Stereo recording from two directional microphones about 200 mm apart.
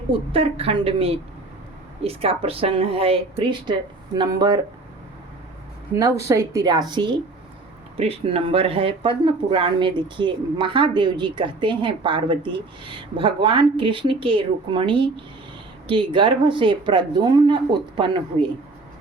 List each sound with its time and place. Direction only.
0.1 s speech: 30° right (ahead or behind)
5.9 s a woman's voice: 15° right (ahead or behind)